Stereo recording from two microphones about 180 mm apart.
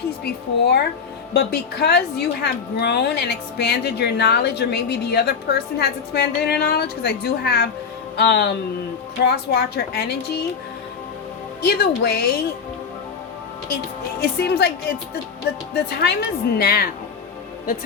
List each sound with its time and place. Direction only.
0.3 s a woman's voice: 65° left (ahead or behind)
11.6 s a woman's voice: 60° left (ahead or behind)
14.2 s a woman's voice: 60° left (ahead or behind)
15.7 s a woman's voice: 65° left (ahead or behind)